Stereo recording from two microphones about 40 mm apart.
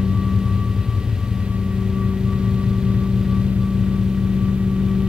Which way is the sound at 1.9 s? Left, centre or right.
Centre.